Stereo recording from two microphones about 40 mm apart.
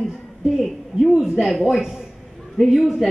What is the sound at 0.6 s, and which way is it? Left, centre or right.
A woman's voice, centre.